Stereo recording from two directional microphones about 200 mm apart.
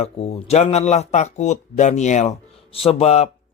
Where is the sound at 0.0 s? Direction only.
30° left (ahead or behind).